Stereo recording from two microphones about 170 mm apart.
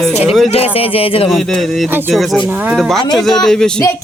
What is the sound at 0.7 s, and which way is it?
Music, 35° left (ahead or behind).